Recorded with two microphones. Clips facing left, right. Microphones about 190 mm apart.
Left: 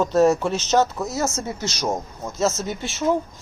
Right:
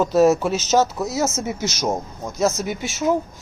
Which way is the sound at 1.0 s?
20° right (ahead or behind).